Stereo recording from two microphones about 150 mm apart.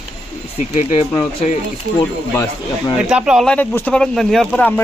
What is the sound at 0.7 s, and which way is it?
Speech, 55° left (ahead or behind).